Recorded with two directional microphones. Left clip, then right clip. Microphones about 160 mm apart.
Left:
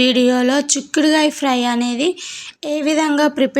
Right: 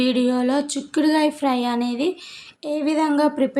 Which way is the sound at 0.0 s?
20° left (ahead or behind).